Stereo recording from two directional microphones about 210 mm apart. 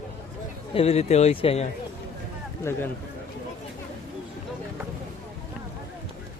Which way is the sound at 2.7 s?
10° left (ahead or behind).